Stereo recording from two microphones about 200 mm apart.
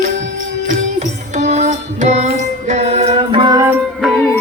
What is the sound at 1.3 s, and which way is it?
Music, 35° right (ahead or behind).